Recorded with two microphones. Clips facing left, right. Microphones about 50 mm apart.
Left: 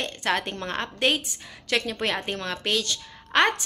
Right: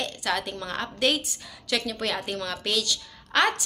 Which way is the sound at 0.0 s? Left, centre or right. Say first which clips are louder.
Left 2 dB; left.